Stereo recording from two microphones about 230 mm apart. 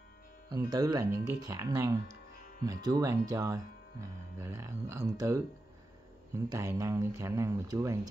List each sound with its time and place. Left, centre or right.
0.5 s speech: centre